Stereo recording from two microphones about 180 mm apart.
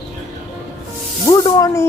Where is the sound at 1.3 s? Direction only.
20° left (ahead or behind).